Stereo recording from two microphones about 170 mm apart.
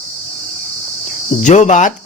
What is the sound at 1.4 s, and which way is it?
Speech, 45° left (ahead or behind).